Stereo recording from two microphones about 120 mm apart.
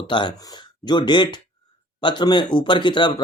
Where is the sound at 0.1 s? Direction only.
40° left (ahead or behind).